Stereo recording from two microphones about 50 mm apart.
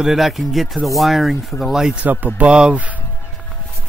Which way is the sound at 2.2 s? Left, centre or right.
Right.